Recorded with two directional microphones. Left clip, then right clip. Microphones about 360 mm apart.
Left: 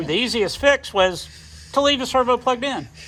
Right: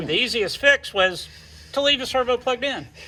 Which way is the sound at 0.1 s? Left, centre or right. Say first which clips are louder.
Left 1 dB; left.